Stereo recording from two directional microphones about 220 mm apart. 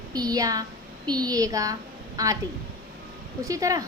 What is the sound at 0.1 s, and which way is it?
A woman's voice, 15° right (ahead or behind).